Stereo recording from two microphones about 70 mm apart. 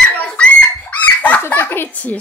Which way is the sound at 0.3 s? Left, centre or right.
Centre.